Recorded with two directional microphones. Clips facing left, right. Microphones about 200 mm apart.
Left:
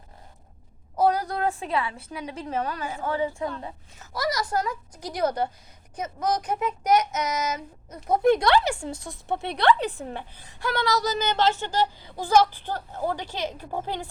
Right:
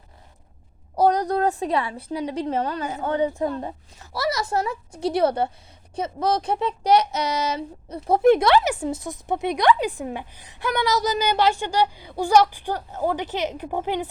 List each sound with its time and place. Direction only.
0.9 s a sound: 35° right (ahead or behind)
1.9 s a woman's voice: 35° right (ahead or behind)
4.2 s a woman's voice: 25° right (ahead or behind)